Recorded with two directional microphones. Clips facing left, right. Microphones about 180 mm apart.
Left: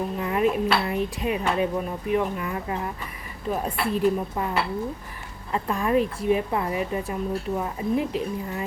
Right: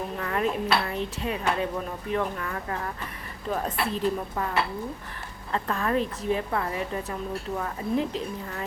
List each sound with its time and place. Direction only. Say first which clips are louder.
0.2 s a woman's voice: left 4 dB; 15° left (ahead or behind)
5.5 s a woman's voice: left 3 dB; 10° left (ahead or behind)